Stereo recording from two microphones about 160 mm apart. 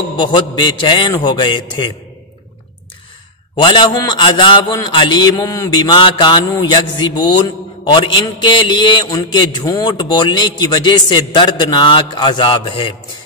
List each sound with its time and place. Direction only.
0.2 s a man's voice: 30° left (ahead or behind)
3.6 s a man's voice: 30° left (ahead or behind)